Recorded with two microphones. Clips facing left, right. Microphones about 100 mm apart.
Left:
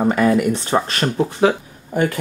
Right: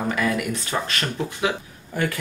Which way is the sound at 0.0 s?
35° left (ahead or behind).